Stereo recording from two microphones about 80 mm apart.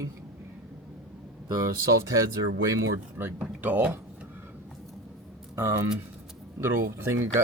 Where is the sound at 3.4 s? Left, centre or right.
Right.